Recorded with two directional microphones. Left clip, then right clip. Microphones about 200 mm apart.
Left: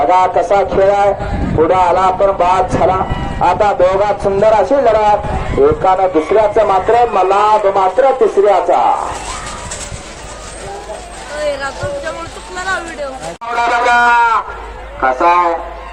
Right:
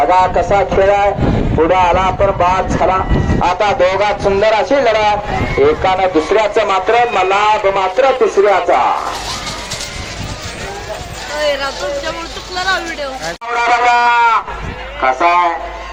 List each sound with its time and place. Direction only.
0.0 s a man's voice: 55° left (ahead or behind); by 8.8 s 10° left (ahead or behind)
11.4 s a sound: 25° right (ahead or behind)
13.5 s a man's voice: 45° left (ahead or behind)